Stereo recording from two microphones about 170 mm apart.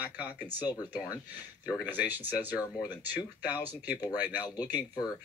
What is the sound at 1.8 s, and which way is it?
Speech, 10° right (ahead or behind).